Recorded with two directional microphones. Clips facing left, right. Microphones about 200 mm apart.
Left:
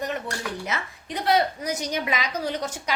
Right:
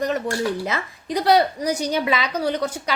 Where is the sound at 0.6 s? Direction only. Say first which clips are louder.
Right 5 dB; 35° right (ahead or behind).